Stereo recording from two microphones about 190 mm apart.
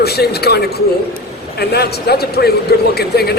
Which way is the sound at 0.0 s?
55° left (ahead or behind).